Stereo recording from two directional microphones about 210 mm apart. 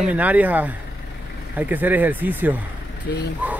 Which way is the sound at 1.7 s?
10° right (ahead or behind).